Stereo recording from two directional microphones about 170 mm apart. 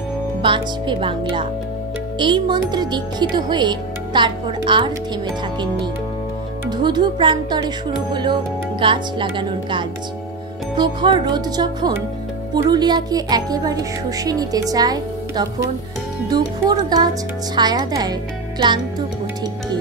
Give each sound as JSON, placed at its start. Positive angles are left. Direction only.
{"t": 0.4, "sound": "speech", "side_deg": -30}
{"t": 6.7, "sound": "speech", "side_deg": -25}